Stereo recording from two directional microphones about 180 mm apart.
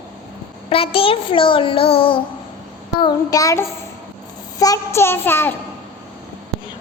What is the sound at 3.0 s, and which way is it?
A woman's voice, 20° left (ahead or behind).